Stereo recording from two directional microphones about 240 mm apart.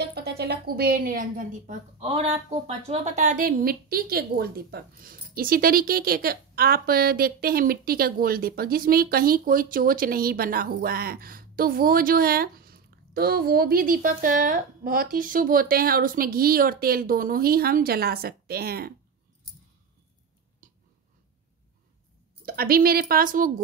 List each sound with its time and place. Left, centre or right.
0.0 s a woman's voice: right
20.6 s a sound: right
22.4 s a woman's voice: right